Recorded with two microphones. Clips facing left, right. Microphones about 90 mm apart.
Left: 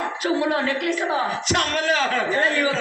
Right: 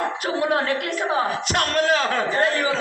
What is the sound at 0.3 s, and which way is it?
Speech, 50° right (ahead or behind).